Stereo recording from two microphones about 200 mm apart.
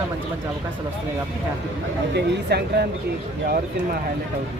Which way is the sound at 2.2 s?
55° right (ahead or behind).